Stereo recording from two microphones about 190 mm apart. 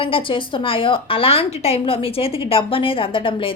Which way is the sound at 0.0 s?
25° left (ahead or behind).